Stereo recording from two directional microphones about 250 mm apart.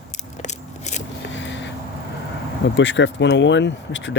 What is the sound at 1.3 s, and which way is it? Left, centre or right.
Vehicle, left.